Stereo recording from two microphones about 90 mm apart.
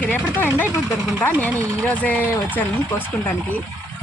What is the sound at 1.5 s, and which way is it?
Speech, 35° right (ahead or behind).